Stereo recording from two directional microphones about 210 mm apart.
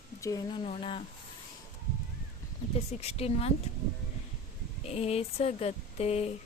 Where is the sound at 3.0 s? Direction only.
30° left (ahead or behind).